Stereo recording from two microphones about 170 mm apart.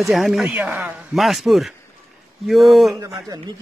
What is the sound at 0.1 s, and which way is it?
Speech, centre (ahead or behind).